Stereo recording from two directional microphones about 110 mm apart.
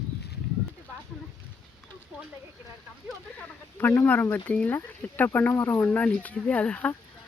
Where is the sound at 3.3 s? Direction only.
20° left (ahead or behind).